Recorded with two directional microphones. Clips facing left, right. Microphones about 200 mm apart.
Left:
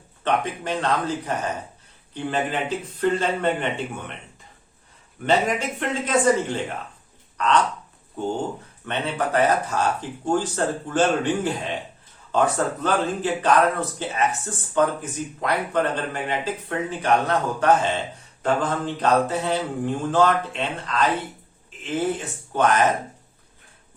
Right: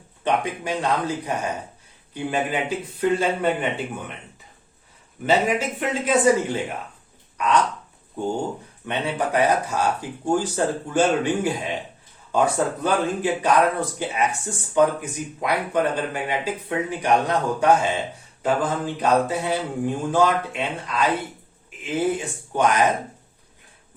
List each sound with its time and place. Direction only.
0.3 s speech: 10° right (ahead or behind)
5.2 s speech: 5° right (ahead or behind)
8.9 s speech: 10° right (ahead or behind)